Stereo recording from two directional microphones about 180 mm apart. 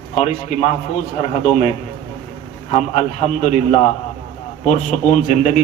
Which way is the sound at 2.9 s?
40° left (ahead or behind).